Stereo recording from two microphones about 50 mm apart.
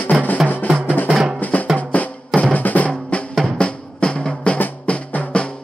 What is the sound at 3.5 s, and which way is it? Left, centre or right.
Drum, centre.